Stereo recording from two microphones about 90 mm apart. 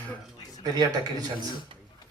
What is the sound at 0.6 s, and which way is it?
Speech, 50° right (ahead or behind).